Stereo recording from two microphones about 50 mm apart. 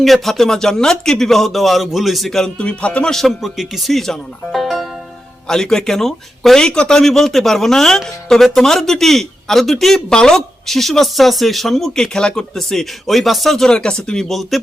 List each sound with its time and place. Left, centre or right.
0.0 s speech: centre
2.6 s music: left
3.1 s speech: centre
6.7 s speech: centre
13.7 s speech: centre